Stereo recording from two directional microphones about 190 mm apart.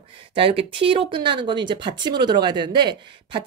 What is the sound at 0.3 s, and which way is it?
Speech, 30° right (ahead or behind).